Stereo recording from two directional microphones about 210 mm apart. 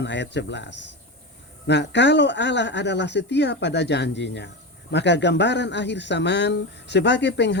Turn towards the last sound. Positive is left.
turn(degrees=55)  # may be behind; listen again after turning